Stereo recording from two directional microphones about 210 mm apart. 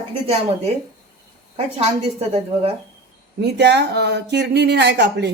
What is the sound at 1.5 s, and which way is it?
A woman's voice, 30° right (ahead or behind).